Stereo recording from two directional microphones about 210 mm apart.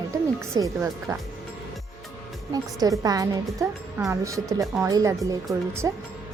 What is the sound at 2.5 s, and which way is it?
A woman's voice, 15° right (ahead or behind).